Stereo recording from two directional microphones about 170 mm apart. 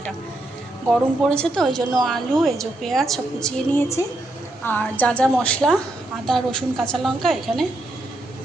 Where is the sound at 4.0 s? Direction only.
20° left (ahead or behind).